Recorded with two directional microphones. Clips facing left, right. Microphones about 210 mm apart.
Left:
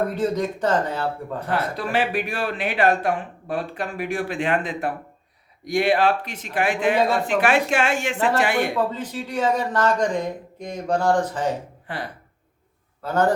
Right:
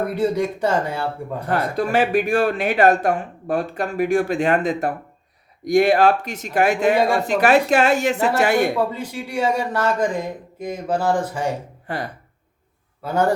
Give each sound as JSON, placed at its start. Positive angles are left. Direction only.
{"t": 0.1, "sound": "speech", "side_deg": -10}
{"t": 1.5, "sound": "speech", "side_deg": -45}
{"t": 8.7, "sound": "speech", "side_deg": -10}
{"t": 11.9, "sound": "speech", "side_deg": -45}
{"t": 13.0, "sound": "speech", "side_deg": -10}